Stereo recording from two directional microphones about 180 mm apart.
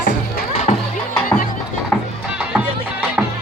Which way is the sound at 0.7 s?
35° left (ahead or behind).